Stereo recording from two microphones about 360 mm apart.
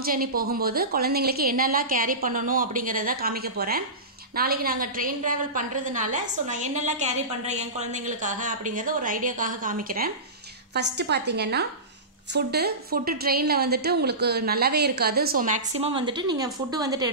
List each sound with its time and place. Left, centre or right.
0.0 s a woman's voice: right